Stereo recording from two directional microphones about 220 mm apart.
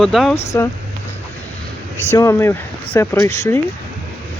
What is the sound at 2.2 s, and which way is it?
Speech, 10° left (ahead or behind).